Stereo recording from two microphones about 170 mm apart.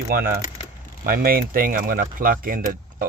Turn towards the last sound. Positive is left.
turn(degrees=-55)  # may be behind; listen again after turning